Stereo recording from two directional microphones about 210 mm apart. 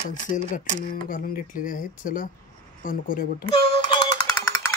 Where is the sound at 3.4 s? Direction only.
25° left (ahead or behind).